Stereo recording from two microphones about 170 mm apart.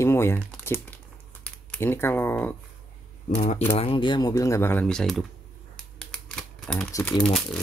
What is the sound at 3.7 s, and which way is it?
Speech, 30° left (ahead or behind).